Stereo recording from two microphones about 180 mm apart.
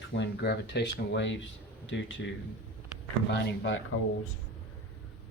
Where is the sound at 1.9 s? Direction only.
90° left.